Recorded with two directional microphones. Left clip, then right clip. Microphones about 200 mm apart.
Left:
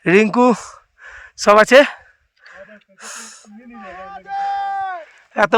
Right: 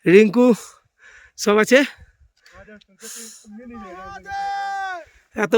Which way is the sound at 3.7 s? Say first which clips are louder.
Left 3 dB; 20° right (ahead or behind).